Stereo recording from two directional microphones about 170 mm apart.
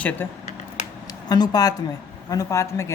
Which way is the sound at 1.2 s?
25° left (ahead or behind).